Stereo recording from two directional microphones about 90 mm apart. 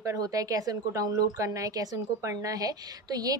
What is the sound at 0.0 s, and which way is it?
A woman's voice, 40° right (ahead or behind).